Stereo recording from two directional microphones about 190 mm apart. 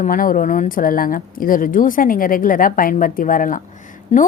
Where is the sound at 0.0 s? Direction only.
45° left (ahead or behind).